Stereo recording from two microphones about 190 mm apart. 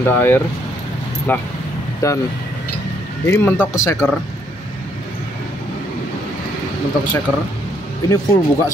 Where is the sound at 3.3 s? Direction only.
10° left (ahead or behind).